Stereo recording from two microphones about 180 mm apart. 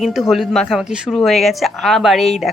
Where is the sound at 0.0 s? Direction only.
Centre (ahead or behind).